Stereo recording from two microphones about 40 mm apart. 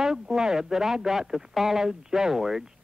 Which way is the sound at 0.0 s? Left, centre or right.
Centre.